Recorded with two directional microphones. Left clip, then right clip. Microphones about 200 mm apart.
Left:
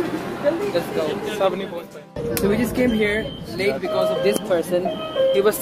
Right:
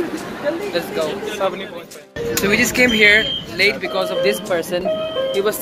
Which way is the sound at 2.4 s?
10° left (ahead or behind).